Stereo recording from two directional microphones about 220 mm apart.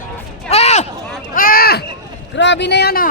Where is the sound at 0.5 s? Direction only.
30° left (ahead or behind).